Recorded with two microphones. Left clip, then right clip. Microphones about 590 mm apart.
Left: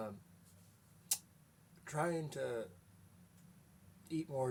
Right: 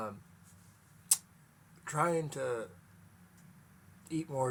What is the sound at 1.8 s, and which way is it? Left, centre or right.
Speech, left.